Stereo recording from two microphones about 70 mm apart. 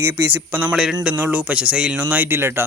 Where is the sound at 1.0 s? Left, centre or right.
Right.